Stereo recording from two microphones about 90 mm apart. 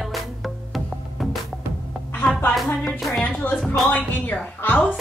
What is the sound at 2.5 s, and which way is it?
Music, centre (ahead or behind).